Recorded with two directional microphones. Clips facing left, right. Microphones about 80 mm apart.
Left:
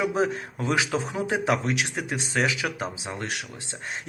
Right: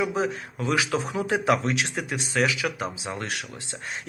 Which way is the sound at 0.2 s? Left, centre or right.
Left.